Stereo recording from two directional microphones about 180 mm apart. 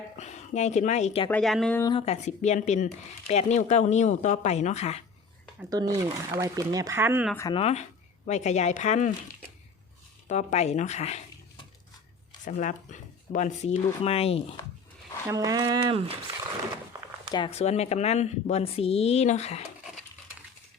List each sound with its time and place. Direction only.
0.2 s speech: 40° left (ahead or behind)
1.3 s speech: centre (ahead or behind)
1.8 s speech: 30° left (ahead or behind)
5.7 s speech: 20° right (ahead or behind)
7.5 s speech: 35° left (ahead or behind)
10.2 s speech: 40° left (ahead or behind)
12.5 s speech: 45° left (ahead or behind)
15.3 s speech: 20° right (ahead or behind)
17.3 s speech: 30° left (ahead or behind)